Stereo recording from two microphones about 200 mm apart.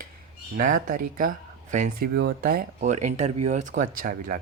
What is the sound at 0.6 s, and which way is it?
Speech, 40° right (ahead or behind).